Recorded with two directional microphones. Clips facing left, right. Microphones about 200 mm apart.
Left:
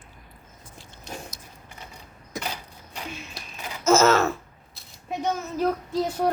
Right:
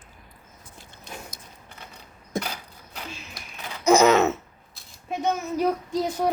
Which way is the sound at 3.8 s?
15° right (ahead or behind).